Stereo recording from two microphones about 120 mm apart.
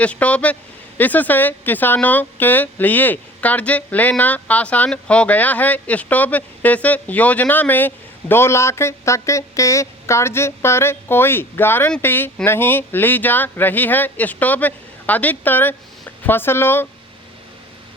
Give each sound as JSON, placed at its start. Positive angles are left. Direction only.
{"t": 0.0, "sound": "speech", "side_deg": 10}